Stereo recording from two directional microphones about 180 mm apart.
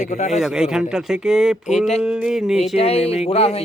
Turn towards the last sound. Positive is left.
turn(degrees=35)  # may be behind; listen again after turning